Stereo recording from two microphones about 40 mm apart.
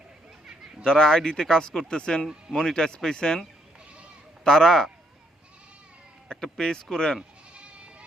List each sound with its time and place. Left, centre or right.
0.9 s speech: centre
4.4 s speech: centre
6.2 s speech: centre
7.5 s goat: right